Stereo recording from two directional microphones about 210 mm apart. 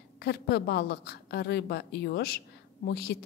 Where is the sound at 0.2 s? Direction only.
50° left (ahead or behind).